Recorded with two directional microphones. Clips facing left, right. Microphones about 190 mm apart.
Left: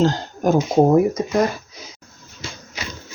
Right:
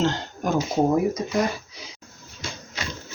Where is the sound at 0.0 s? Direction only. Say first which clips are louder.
Left 6 dB; 40° left (ahead or behind).